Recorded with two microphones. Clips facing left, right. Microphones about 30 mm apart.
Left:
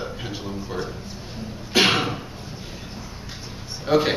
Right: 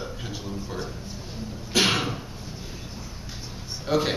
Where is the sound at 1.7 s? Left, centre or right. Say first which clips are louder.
Left 4 dB; centre.